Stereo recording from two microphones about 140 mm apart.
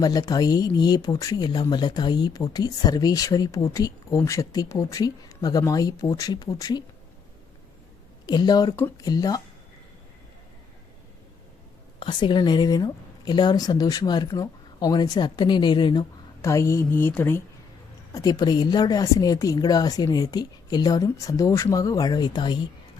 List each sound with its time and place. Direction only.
0.0 s speech: 25° left (ahead or behind)
8.3 s speech: 30° left (ahead or behind)
8.7 s a woman's voice: 15° left (ahead or behind)
9.0 s speech: 25° left (ahead or behind)
11.9 s speech: 35° left (ahead or behind)
16.4 s a woman's voice: 20° left (ahead or behind)
18.1 s speech: 25° left (ahead or behind)